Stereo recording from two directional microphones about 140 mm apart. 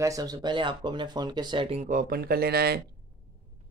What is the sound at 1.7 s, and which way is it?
Speech, 60° right (ahead or behind).